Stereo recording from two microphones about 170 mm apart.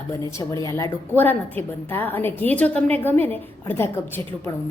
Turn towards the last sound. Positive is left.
turn(degrees=15)  # may be behind; listen again after turning